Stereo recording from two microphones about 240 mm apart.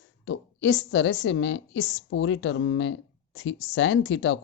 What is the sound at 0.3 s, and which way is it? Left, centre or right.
A woman's voice, left.